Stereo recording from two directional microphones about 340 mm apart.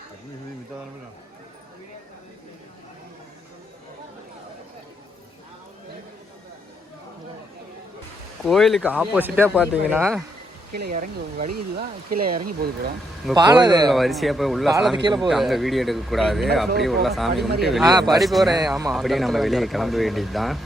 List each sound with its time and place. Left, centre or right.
8.4 s speech: centre
10.7 s speech: right
12.3 s speech: right
13.3 s a man's voice: centre
13.8 s speech: centre
15.0 s a man's voice: centre
15.3 s speech: centre